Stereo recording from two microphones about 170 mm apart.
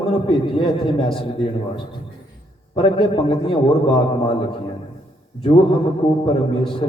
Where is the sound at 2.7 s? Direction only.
30° left (ahead or behind).